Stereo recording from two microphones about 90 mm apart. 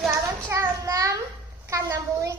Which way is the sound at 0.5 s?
35° right (ahead or behind).